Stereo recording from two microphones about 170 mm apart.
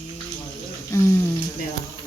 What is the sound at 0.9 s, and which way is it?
Speech, 20° left (ahead or behind).